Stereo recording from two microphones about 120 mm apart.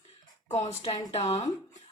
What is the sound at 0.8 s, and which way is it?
Speech, 55° left (ahead or behind).